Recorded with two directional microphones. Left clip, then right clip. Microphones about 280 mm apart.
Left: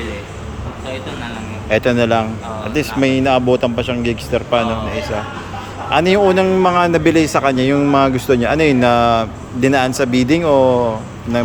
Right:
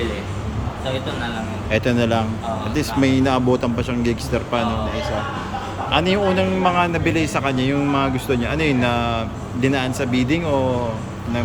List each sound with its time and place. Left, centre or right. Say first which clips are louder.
1.7 s speech: left 6 dB; centre